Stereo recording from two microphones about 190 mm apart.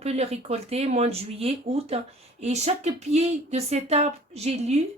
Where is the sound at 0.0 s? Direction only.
35° right (ahead or behind).